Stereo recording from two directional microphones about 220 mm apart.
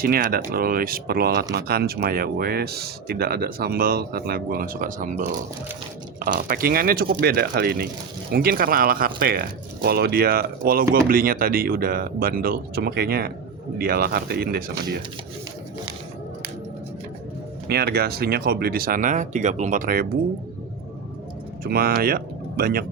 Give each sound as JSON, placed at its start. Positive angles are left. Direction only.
{"t": 0.0, "sound": "speech", "side_deg": -40}
{"t": 17.7, "sound": "speech", "side_deg": -45}
{"t": 21.6, "sound": "speech", "side_deg": -45}